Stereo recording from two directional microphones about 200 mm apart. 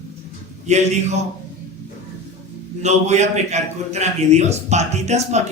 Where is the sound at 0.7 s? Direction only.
35° right (ahead or behind).